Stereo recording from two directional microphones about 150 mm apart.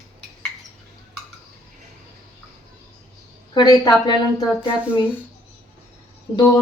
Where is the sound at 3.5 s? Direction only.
30° left (ahead or behind).